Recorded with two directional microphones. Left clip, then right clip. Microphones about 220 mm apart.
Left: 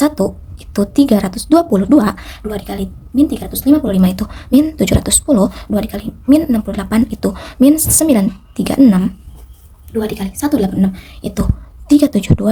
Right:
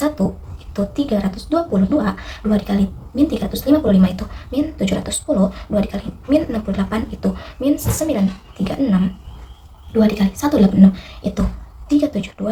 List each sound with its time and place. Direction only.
0.7 s speech: 50° left (ahead or behind)